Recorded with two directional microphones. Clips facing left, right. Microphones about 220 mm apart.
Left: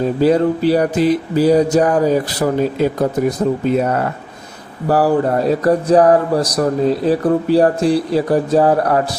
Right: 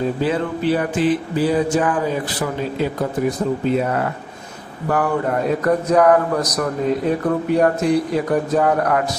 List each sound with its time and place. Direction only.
0.2 s speech: 40° left (ahead or behind)
4.9 s speech: 35° left (ahead or behind)